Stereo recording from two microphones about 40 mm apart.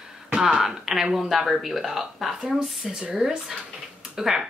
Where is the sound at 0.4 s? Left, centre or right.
Centre.